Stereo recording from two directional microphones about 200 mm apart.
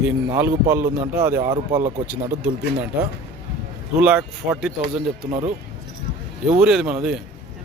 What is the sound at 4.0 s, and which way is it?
Speech, 5° right (ahead or behind).